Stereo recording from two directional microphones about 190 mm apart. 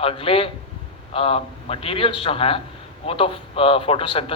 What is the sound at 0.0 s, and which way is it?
A man's voice, 30° left (ahead or behind).